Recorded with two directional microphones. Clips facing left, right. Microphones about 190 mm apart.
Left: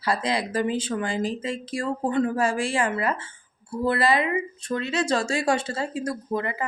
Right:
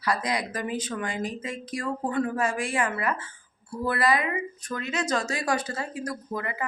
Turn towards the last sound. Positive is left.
turn(degrees=30)  # may be behind; listen again after turning